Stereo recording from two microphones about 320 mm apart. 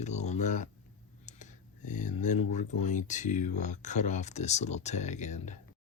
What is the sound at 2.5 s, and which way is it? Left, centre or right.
Speech, left.